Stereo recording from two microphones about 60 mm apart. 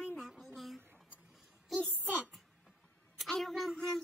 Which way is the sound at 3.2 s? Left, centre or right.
Centre.